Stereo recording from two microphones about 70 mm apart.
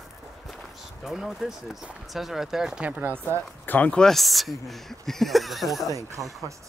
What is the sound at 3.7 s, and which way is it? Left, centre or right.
Speech, left.